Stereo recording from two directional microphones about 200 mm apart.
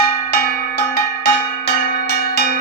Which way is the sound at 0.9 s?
55° left (ahead or behind).